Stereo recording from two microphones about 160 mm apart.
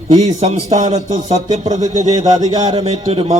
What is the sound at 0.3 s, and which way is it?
Speech, 40° right (ahead or behind).